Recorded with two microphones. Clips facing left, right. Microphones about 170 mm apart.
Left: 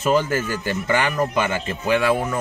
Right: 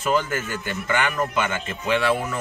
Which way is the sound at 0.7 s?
35° left (ahead or behind).